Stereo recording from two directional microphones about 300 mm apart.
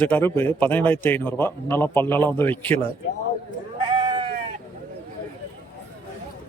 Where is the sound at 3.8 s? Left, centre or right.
Centre.